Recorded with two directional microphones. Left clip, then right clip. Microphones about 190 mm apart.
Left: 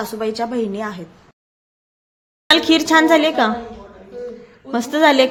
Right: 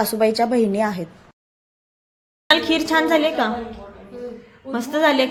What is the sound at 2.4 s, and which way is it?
A woman's voice, 30° left (ahead or behind).